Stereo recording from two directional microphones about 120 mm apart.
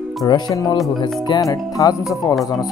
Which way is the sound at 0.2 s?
30° left (ahead or behind).